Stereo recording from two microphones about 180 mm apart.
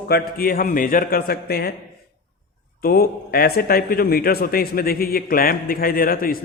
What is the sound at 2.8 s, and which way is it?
Speech, 55° left (ahead or behind).